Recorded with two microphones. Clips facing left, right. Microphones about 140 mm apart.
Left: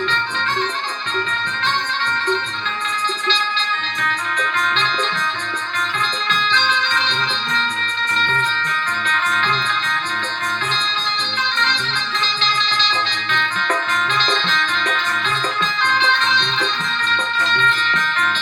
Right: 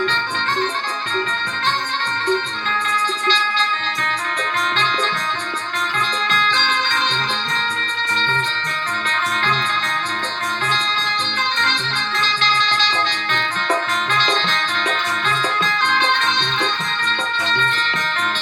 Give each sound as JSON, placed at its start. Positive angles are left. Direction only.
{"t": 9.0, "sound": "music", "side_deg": -40}
{"t": 14.2, "sound": "music", "side_deg": -40}
{"t": 17.3, "sound": "music", "side_deg": -35}